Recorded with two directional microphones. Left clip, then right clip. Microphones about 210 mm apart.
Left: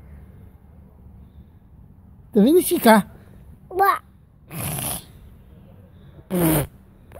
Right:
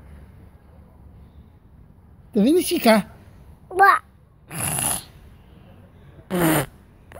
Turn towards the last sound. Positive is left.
turn(degrees=5)  # may be behind; listen again after turning